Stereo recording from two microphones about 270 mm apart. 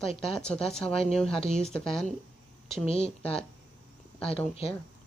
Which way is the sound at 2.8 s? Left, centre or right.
Left.